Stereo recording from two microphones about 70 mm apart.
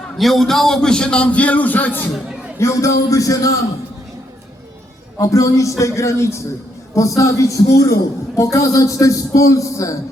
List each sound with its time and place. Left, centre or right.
0.2 s a man's voice: centre; by 2.0 s left
2.6 s a man's voice: left
5.1 s a man's voice: left